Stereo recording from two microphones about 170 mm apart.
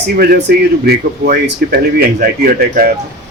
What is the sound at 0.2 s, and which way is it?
Speech, 75° right (ahead or behind).